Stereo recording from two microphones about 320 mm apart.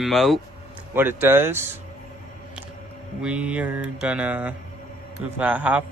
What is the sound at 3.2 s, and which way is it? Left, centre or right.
Speech, centre.